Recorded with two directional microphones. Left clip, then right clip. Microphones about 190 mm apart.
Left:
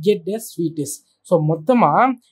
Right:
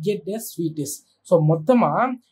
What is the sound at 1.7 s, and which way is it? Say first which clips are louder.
Speech: left 5 dB; 35° left (ahead or behind).